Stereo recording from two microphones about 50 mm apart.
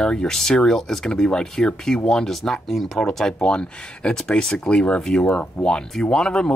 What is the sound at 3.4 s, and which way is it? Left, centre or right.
Speech, centre.